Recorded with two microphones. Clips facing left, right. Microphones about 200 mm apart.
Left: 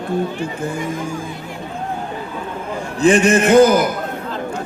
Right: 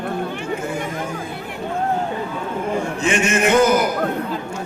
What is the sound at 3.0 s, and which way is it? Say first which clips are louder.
Speech: left 9 dB; 35° left (ahead or behind).